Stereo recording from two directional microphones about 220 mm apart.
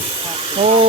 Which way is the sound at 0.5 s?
25° right (ahead or behind).